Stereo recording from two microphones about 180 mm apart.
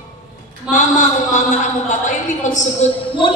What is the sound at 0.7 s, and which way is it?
A man's voice, 45° left (ahead or behind).